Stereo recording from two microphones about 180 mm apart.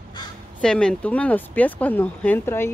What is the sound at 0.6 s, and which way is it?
Speech, 5° left (ahead or behind).